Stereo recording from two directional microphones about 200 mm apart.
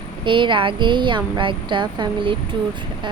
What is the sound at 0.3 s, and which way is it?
Speech, 25° right (ahead or behind).